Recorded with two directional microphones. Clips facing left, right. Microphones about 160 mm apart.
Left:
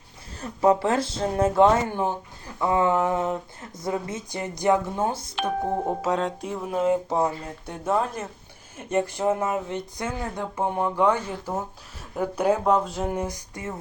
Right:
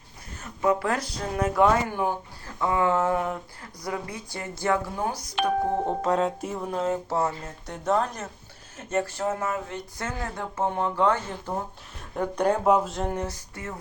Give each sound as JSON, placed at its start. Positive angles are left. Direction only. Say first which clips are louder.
{"t": 0.4, "sound": "speech", "louder": "left 4 dB", "side_deg": 30}
{"t": 6.0, "sound": "music", "louder": "right 1 dB", "side_deg": 0}
{"t": 7.7, "sound": "speech", "louder": "even", "side_deg": 10}
{"t": 12.1, "sound": "music", "louder": "left 1 dB", "side_deg": 5}
{"t": 12.6, "sound": "music", "louder": "even", "side_deg": -5}
{"t": 13.2, "sound": "speech", "louder": "left 2 dB", "side_deg": 15}